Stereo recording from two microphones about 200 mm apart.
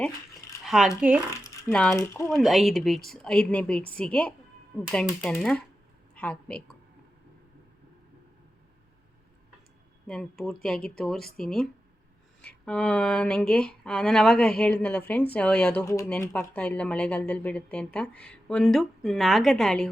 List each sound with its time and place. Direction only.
0.6 s speech: centre (ahead or behind)
1.3 s speech: 15° left (ahead or behind)
2.4 s a woman's voice: centre (ahead or behind)
10.1 s speech: 5° left (ahead or behind)
15.8 s speech: 15° left (ahead or behind)
16.0 s speech: 5° left (ahead or behind)